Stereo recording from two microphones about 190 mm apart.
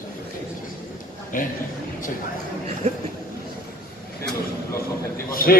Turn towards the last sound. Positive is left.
turn(degrees=50)  # may be behind; listen again after turning